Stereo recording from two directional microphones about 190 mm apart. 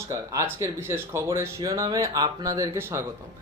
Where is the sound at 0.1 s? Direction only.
15° right (ahead or behind).